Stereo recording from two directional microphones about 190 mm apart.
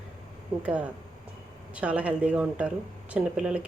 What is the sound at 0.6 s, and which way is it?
Speech, 5° right (ahead or behind).